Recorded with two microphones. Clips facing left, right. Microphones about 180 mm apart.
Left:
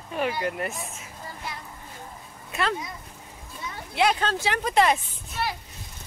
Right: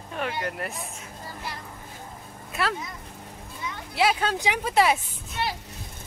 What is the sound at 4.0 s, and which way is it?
Speech, 5° right (ahead or behind).